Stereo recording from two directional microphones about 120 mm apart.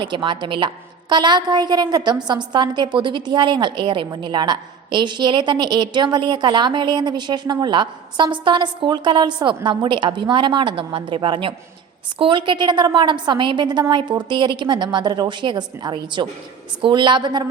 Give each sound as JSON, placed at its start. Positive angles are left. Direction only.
{"t": 0.0, "sound": "a woman's voice", "side_deg": -40}